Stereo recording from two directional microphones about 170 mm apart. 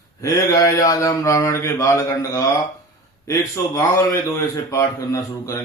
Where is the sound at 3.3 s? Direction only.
20° left (ahead or behind).